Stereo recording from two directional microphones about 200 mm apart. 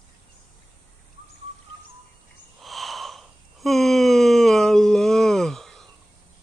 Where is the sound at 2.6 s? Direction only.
Centre (ahead or behind).